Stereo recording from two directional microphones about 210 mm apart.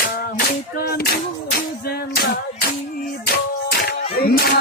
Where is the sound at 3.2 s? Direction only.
50° left (ahead or behind).